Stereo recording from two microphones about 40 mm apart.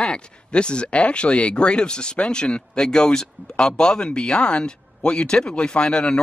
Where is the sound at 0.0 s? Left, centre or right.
Left.